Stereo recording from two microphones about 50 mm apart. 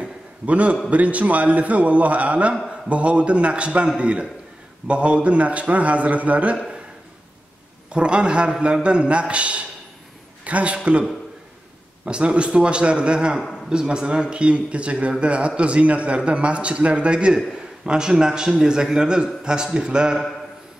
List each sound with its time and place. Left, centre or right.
0.0 s a sound: right
0.8 s speech: right
7.9 s a man's voice: right